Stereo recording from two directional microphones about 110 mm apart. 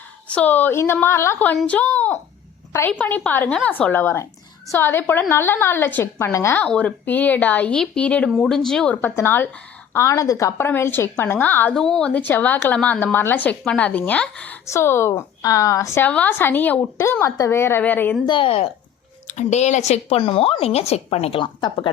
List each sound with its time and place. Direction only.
0.3 s a woman's voice: 15° left (ahead or behind)
6.6 s a woman's voice: 10° left (ahead or behind)
9.0 s a woman's voice: 20° left (ahead or behind)
11.8 s a woman's voice: 5° left (ahead or behind)
14.7 s a woman's voice: 25° left (ahead or behind)
16.0 s a woman's voice: 15° left (ahead or behind)
18.3 s a woman's voice: 55° left (ahead or behind)
19.3 s speech: 90° left; by 21.4 s 65° left (ahead or behind)
21.4 s speech: 40° left (ahead or behind)